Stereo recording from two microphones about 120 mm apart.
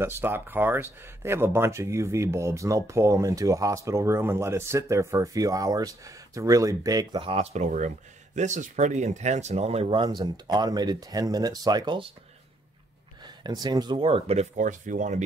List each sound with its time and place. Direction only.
0.0 s speech: 20° right (ahead or behind)
7.2 s speech: 60° right (ahead or behind)
9.9 s speech: 40° right (ahead or behind)
13.2 s speech: 35° right (ahead or behind); by 15.2 s 90° right